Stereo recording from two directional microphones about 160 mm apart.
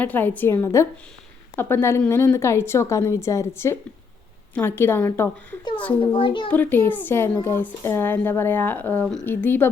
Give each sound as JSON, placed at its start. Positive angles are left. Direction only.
{"t": 0.0, "sound": "a woman's voice", "side_deg": 10}
{"t": 6.1, "sound": "a child's voice", "side_deg": 30}
{"t": 6.5, "sound": "a woman's voice", "side_deg": 10}